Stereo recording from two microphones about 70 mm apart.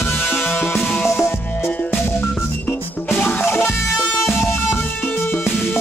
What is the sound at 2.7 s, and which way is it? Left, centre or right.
Music, left.